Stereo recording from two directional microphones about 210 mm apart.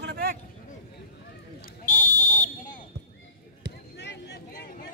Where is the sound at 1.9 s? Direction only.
35° left (ahead or behind).